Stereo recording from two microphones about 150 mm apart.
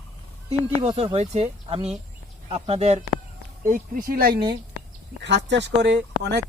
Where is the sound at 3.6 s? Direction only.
60° right (ahead or behind); by 4.5 s 90° right.